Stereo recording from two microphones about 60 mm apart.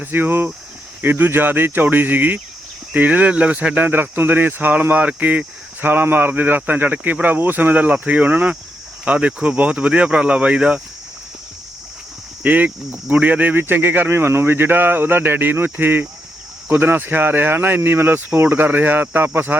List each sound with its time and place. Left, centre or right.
0.0 s speech: right; by 10.8 s centre
12.4 s speech: right